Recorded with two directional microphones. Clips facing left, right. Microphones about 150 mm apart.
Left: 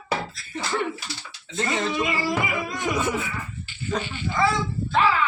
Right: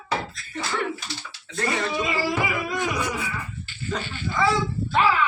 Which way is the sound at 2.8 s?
20° left (ahead or behind).